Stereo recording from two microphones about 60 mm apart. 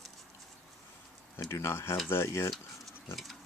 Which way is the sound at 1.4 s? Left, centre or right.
Left.